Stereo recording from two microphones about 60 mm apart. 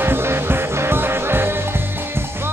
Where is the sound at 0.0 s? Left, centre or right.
Right.